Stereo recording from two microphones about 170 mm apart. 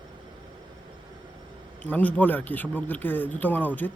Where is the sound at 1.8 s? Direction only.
10° left (ahead or behind).